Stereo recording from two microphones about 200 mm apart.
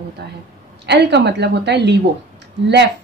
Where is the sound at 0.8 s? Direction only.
55° right (ahead or behind).